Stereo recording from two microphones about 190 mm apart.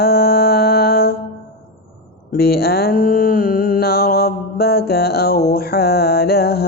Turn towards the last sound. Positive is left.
turn(degrees=55)  # may be behind; listen again after turning